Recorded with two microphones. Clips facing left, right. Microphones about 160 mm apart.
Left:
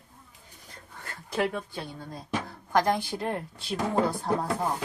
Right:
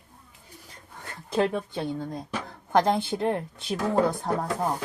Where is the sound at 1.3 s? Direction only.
25° right (ahead or behind).